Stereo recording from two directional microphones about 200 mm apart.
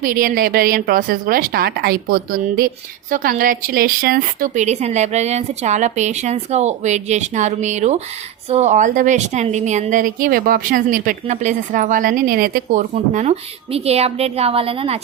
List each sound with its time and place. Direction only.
0.0 s a woman's voice: 45° right (ahead or behind)
12.9 s a woman's voice: 35° right (ahead or behind)